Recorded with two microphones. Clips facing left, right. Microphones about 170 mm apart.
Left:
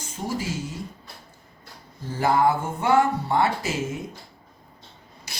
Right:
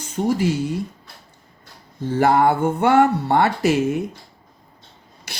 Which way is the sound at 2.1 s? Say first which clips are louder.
Right 4 dB; 65° right (ahead or behind).